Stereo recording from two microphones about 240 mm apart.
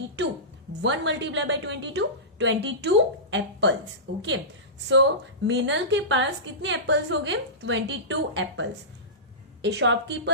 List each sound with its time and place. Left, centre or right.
0.8 s a woman's voice: right
4.9 s a woman's voice: right